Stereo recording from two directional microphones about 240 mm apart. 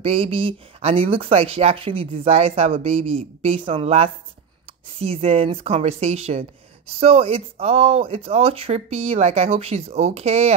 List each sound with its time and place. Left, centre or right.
0.0 s speech: right